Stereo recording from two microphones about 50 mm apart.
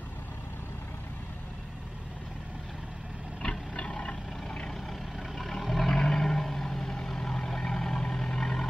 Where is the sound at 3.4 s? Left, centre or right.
Centre.